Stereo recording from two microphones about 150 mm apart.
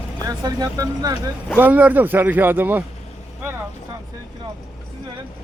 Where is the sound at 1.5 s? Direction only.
10° right (ahead or behind).